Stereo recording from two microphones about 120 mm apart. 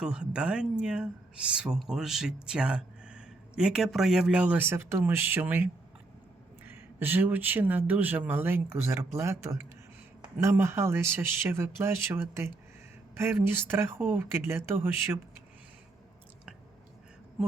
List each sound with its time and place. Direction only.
0.0 s speech: 10° right (ahead or behind)